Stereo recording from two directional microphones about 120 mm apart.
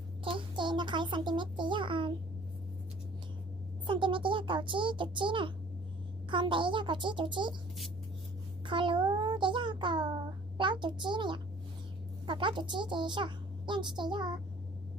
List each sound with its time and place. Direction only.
0.3 s a child's voice: 45° right (ahead or behind)
3.8 s a sound: 45° right (ahead or behind)
6.3 s a child's voice: 45° right (ahead or behind)
8.6 s child singing: 45° right (ahead or behind)
10.6 s a child's voice: 40° right (ahead or behind)